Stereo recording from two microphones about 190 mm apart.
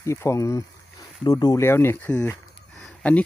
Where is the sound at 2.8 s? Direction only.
5° left (ahead or behind).